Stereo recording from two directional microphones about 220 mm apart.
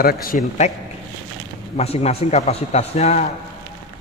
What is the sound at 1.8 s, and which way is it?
A man's voice, 30° left (ahead or behind).